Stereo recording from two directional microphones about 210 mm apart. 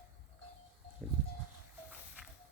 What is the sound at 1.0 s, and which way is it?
Goat, 5° left (ahead or behind).